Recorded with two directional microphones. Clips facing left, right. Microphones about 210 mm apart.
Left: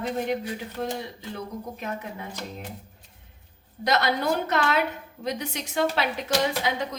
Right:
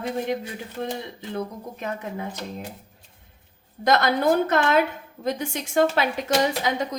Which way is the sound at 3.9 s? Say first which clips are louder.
Right 4 dB; 50° right (ahead or behind).